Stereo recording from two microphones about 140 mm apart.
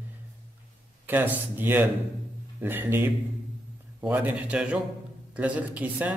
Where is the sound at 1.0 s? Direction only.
15° right (ahead or behind).